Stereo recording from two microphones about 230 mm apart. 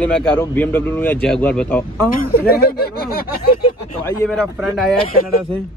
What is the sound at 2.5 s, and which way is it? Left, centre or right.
Speech, left.